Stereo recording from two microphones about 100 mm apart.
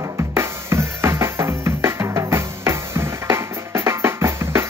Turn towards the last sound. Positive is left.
turn(degrees=-25)  # may be behind; listen again after turning